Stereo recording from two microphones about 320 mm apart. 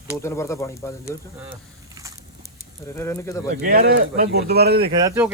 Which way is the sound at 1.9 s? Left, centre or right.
Centre.